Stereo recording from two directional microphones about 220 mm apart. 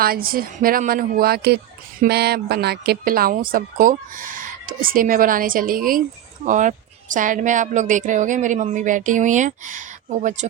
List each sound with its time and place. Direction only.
0.0 s speech: 40° right (ahead or behind)